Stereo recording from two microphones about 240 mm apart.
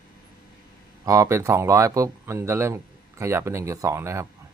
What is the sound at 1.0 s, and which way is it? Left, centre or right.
Speech, centre.